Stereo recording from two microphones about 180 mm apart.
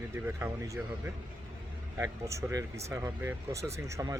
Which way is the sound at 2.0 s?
15° right (ahead or behind).